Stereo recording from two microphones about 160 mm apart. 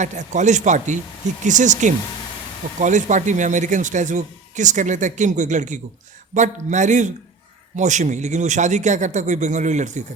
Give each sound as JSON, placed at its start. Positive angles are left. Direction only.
{"t": 0.0, "sound": "speech", "side_deg": -50}